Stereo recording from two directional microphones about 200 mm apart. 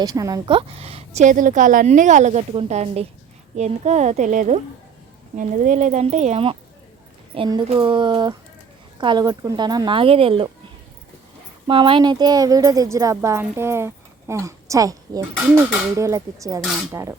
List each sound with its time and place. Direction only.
0.0 s a woman's voice: 20° right (ahead or behind)
11.7 s speech: 25° right (ahead or behind)